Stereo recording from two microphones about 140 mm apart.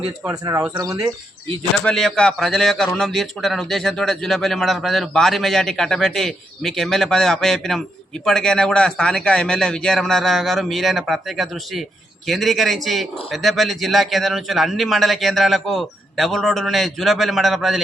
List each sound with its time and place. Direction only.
0.3 s speech: 20° right (ahead or behind)
1.8 s a man's voice: 5° left (ahead or behind)